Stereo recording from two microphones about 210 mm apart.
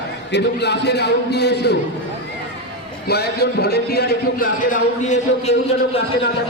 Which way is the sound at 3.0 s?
50° left (ahead or behind).